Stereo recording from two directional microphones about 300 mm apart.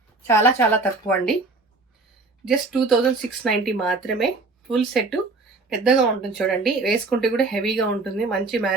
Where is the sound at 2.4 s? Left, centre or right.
Centre.